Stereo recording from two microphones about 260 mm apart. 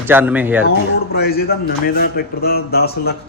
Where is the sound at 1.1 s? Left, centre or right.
Left.